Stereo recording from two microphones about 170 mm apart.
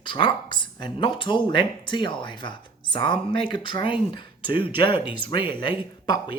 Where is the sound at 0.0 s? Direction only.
30° left (ahead or behind).